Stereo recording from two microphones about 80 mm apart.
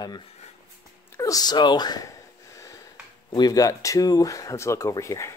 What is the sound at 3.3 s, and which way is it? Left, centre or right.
Speech, left.